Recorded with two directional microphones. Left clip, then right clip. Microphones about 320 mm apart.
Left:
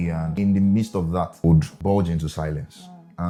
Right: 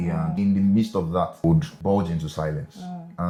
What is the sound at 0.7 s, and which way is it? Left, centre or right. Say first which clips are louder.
Speech: right 1 dB; left.